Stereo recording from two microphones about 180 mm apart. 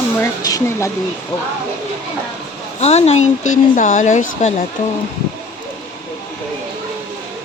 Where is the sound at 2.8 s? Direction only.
35° left (ahead or behind).